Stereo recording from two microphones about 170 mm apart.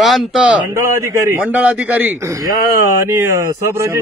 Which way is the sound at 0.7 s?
15° right (ahead or behind).